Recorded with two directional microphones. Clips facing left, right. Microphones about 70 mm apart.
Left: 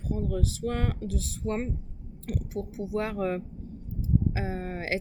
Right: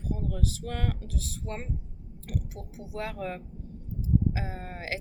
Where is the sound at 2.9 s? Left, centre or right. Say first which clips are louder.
Left 5 dB; left.